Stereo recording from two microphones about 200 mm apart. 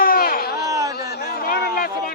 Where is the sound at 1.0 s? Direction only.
50° left (ahead or behind).